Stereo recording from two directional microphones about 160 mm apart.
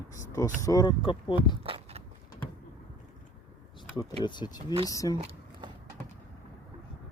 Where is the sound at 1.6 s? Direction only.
35° right (ahead or behind).